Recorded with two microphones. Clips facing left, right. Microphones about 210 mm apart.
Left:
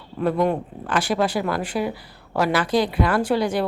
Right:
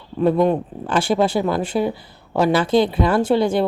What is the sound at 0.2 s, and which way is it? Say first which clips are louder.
A woman's voice: right 4 dB; 20° right (ahead or behind).